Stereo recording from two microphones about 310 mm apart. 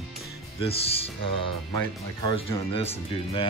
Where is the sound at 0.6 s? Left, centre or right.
Centre.